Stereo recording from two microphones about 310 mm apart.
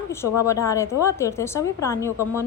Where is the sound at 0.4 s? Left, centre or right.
Centre.